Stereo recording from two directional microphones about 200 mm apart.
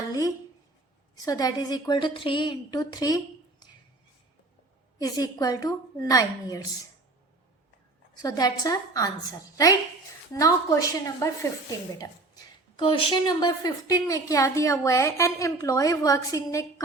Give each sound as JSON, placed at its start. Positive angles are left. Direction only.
{"t": 0.1, "sound": "a sound", "side_deg": 15}
{"t": 1.1, "sound": "a woman's voice", "side_deg": 20}
{"t": 4.9, "sound": "speech", "side_deg": 20}
{"t": 8.2, "sound": "speech", "side_deg": 20}
{"t": 10.3, "sound": "speech", "side_deg": 15}